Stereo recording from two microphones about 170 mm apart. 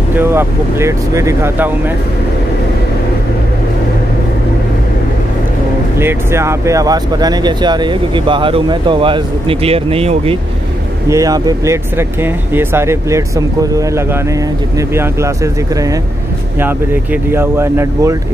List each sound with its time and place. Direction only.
0.1 s speech: 15° right (ahead or behind)
5.9 s speech: 15° right (ahead or behind); by 10.3 s 35° right (ahead or behind)
11.1 s speech: 20° right (ahead or behind)